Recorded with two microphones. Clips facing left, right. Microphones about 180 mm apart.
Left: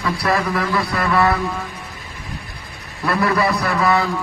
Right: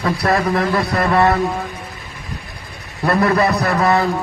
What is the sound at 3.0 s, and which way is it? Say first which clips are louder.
A man's voice: right 3 dB; 45° right (ahead or behind).